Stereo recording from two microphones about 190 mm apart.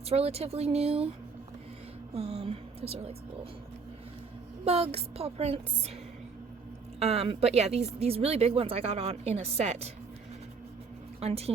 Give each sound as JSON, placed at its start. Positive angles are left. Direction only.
{"t": 0.1, "sound": "a woman's voice", "side_deg": -30}
{"t": 2.1, "sound": "a woman's voice", "side_deg": -35}
{"t": 4.6, "sound": "a woman's voice", "side_deg": -30}
{"t": 7.0, "sound": "a woman's voice", "side_deg": -35}
{"t": 11.2, "sound": "a woman's voice", "side_deg": -30}